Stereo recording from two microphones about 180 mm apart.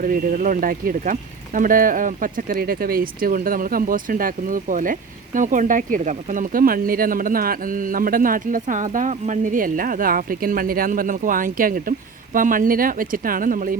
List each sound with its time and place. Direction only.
0.0 s speech: 50° right (ahead or behind)